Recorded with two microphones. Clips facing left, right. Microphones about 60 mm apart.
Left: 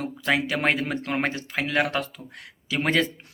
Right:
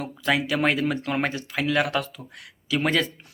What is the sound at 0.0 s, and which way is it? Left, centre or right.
Speech, left.